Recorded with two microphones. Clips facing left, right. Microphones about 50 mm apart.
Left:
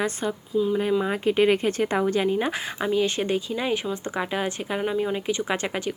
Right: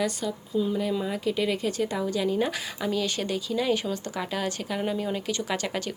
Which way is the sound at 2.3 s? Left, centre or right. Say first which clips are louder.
Left 2 dB; left.